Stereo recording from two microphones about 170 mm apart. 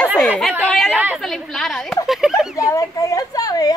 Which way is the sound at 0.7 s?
5° left (ahead or behind).